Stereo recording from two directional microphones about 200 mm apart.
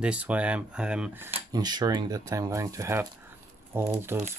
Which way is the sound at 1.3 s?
20° right (ahead or behind).